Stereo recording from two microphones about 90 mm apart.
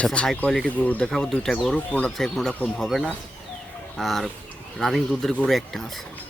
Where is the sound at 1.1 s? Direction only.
5° left (ahead or behind).